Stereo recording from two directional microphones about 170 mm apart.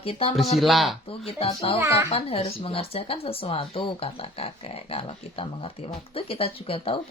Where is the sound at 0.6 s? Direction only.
Centre (ahead or behind).